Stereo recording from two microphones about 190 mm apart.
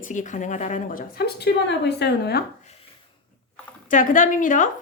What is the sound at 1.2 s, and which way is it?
A woman's voice, 60° left (ahead or behind).